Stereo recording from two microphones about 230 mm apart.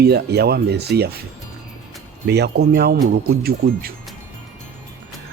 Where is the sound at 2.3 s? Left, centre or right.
Right.